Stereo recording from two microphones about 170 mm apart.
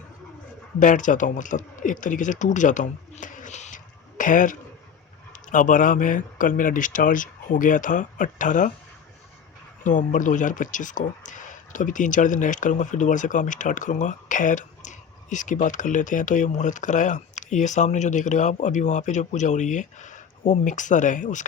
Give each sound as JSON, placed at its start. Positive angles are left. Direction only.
{"t": 0.8, "sound": "speech", "side_deg": 50}
{"t": 9.8, "sound": "speech", "side_deg": 50}